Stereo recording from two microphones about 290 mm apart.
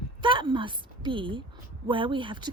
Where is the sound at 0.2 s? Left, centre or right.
Centre.